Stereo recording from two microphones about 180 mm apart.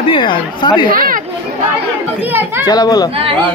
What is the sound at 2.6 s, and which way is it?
Speech, 20° left (ahead or behind).